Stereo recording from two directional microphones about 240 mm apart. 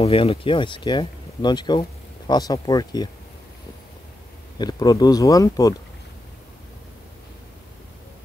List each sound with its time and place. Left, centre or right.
0.0 s speech: left
4.6 s speech: centre